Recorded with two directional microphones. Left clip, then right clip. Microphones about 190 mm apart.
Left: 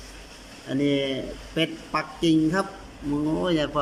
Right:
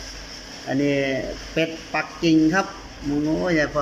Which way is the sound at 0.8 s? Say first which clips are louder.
Right 2 dB; 15° left (ahead or behind).